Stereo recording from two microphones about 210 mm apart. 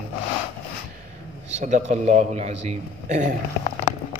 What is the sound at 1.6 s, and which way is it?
A man's voice, 35° right (ahead or behind).